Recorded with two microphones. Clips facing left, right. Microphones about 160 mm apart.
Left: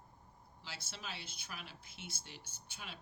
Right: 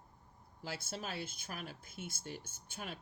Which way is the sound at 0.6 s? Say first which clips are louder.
Right 8 dB; 50° right (ahead or behind).